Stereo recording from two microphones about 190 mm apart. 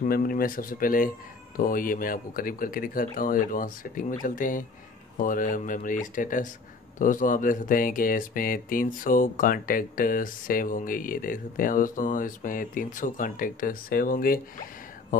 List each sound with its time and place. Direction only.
0.0 s speech: 50° left (ahead or behind)